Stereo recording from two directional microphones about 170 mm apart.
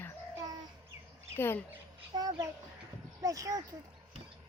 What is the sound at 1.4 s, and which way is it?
Speech, 15° left (ahead or behind).